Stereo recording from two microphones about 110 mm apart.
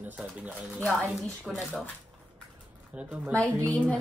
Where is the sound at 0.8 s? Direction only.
Centre (ahead or behind).